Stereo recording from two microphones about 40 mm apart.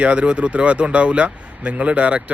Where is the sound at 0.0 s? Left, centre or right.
Right.